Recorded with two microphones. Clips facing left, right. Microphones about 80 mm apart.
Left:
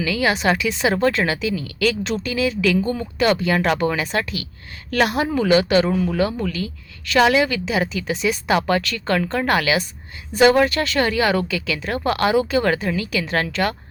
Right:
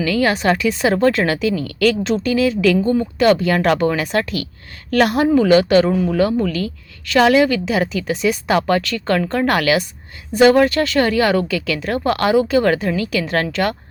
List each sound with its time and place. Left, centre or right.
0.2 s a woman's voice: centre
0.7 s a woman's voice: right
2.8 s a woman's voice: right
3.2 s a woman's voice: right